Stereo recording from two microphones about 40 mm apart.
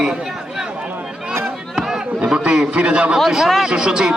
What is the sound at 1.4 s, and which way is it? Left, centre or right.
Chop, centre.